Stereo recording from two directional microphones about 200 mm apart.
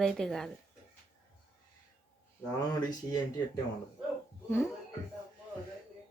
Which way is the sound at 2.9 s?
20° left (ahead or behind).